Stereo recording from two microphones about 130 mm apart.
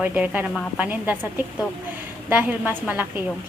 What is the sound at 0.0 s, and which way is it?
A woman's voice, 10° right (ahead or behind).